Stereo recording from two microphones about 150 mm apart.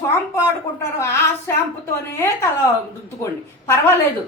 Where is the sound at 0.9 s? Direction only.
15° left (ahead or behind).